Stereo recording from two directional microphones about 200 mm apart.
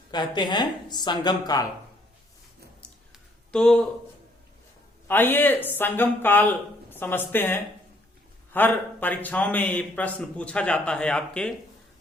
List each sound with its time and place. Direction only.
0.1 s speech: 20° left (ahead or behind)
2.8 s a sound: 5° left (ahead or behind)
5.0 s a man's voice: 10° left (ahead or behind)